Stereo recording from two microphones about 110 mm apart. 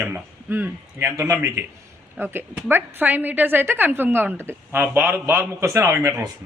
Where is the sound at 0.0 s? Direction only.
20° right (ahead or behind).